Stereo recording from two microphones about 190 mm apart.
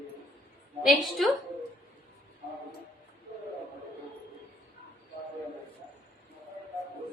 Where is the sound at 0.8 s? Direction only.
Centre (ahead or behind).